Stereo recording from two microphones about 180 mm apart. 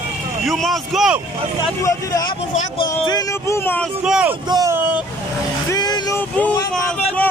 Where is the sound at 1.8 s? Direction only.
20° left (ahead or behind).